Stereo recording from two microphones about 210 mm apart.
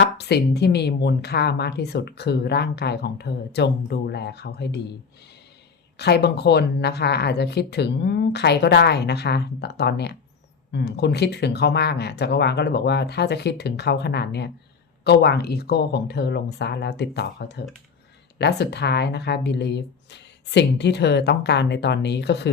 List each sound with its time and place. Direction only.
0.0 s speech: 50° left (ahead or behind)
6.0 s speech: 50° left (ahead or behind)